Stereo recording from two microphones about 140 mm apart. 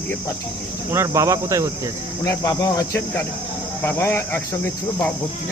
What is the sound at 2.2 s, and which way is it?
Cricket, 20° left (ahead or behind).